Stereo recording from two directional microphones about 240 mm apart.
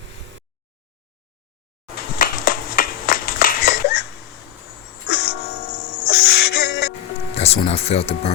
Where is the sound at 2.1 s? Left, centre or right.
Left.